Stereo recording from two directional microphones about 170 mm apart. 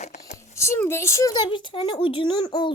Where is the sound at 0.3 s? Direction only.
15° left (ahead or behind).